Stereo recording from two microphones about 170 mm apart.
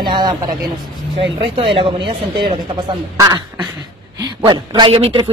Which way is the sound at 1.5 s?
30° right (ahead or behind).